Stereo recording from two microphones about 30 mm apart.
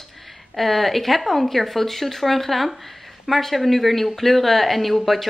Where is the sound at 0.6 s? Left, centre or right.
Centre.